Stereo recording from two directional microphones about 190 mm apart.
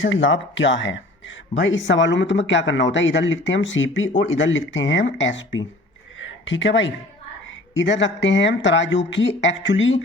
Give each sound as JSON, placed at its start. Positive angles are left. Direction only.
{"t": 0.0, "sound": "speech", "side_deg": 80}